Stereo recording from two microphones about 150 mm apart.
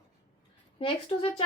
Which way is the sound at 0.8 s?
35° left (ahead or behind).